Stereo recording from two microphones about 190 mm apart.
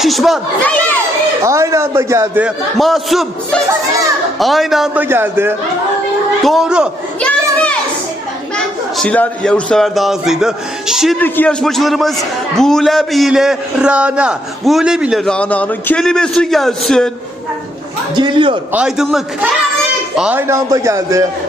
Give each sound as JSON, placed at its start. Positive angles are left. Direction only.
{"t": 0.0, "sound": "a man's voice", "side_deg": 0}
{"t": 1.5, "sound": "a man's voice", "side_deg": -15}
{"t": 2.7, "sound": "a man's voice", "side_deg": 0}
{"t": 5.0, "sound": "a man's voice", "side_deg": -10}
{"t": 6.4, "sound": "a man's voice", "side_deg": 0}
{"t": 7.2, "sound": "a sound", "side_deg": 5}
{"t": 8.5, "sound": "a man's voice", "side_deg": 5}
{"t": 18.1, "sound": "a man's voice", "side_deg": -25}
{"t": 18.7, "sound": "a man's voice", "side_deg": -5}
{"t": 20.5, "sound": "a man's voice", "side_deg": -15}